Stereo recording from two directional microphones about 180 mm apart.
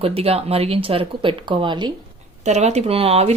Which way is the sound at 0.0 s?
35° right (ahead or behind).